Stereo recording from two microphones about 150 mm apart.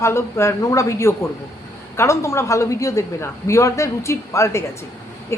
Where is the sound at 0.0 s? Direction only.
20° left (ahead or behind).